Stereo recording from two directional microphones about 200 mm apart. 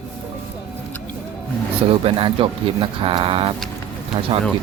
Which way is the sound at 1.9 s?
25° right (ahead or behind).